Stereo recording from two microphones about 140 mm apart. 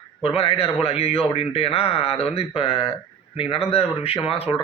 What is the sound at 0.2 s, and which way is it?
A man's voice, 45° left (ahead or behind).